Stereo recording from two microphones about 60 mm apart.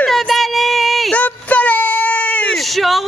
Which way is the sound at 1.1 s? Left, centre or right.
Left.